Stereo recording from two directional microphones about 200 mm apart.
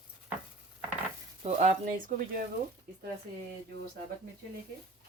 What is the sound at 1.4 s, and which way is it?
Speech, 35° right (ahead or behind).